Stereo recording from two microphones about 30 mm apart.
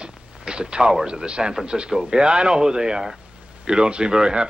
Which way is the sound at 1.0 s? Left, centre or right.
Right.